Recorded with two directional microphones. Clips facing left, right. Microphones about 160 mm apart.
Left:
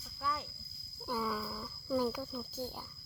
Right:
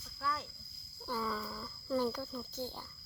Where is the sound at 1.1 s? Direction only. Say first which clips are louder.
Left 1 dB; 10° left (ahead or behind).